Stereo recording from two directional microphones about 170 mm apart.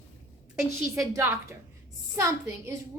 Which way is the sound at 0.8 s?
15° right (ahead or behind).